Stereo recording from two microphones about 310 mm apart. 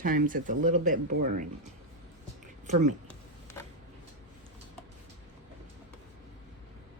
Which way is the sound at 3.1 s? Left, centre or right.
Centre.